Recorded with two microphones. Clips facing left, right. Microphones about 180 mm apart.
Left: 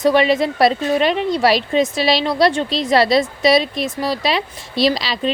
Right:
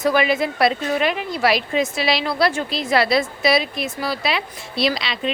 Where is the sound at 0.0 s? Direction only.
30° left (ahead or behind).